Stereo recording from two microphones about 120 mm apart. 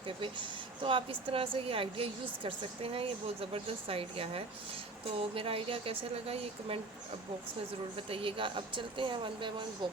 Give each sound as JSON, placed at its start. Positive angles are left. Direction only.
{"t": 0.2, "sound": "a woman's voice", "side_deg": -45}
{"t": 7.9, "sound": "a woman's voice", "side_deg": -50}